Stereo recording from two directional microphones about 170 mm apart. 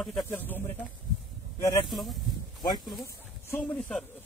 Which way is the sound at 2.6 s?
25° left (ahead or behind).